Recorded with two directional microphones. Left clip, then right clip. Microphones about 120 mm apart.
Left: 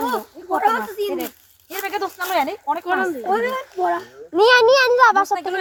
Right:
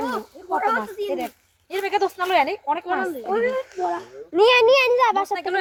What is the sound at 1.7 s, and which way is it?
Speech, 25° right (ahead or behind).